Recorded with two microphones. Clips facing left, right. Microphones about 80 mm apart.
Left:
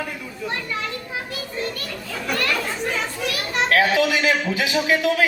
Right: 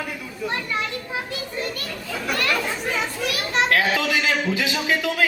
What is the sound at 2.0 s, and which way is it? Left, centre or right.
Speech, centre.